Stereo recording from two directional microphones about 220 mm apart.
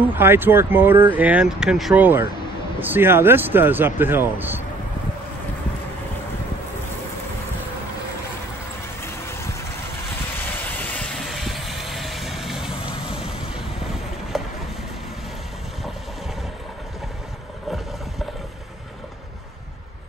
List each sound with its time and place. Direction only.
0.0 s speech: 10° right (ahead or behind)
9.0 s a sound: 10° left (ahead or behind)
10.5 s vehicle: 10° left (ahead or behind)
12.8 s vehicle: 25° left (ahead or behind)
13.6 s vehicle: centre (ahead or behind)